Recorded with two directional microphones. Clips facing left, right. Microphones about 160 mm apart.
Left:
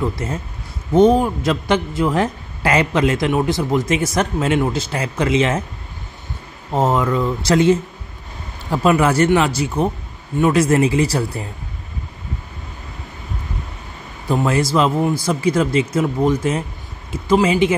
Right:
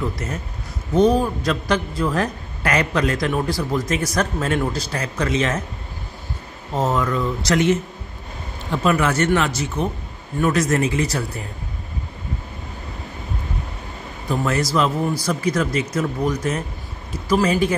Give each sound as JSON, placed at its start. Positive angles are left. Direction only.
{"t": 0.2, "sound": "a man's voice", "side_deg": 30}
{"t": 6.7, "sound": "a man's voice", "side_deg": 30}
{"t": 14.3, "sound": "a man's voice", "side_deg": 30}